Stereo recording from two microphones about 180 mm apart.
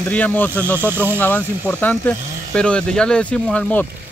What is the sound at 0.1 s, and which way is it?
Speech, 10° left (ahead or behind).